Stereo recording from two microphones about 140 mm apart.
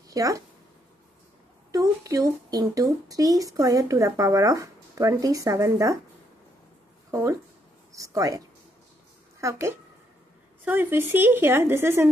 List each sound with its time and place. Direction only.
0.1 s speech: 25° right (ahead or behind)
1.7 s a woman's voice: 25° right (ahead or behind)
7.1 s a woman's voice: 20° right (ahead or behind)
9.4 s a woman's voice: 20° right (ahead or behind)